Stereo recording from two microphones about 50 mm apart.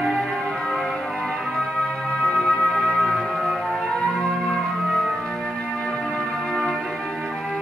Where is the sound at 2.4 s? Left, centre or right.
Centre.